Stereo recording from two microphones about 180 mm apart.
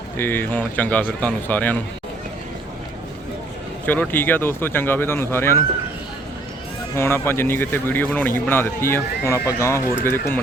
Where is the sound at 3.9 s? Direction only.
10° left (ahead or behind).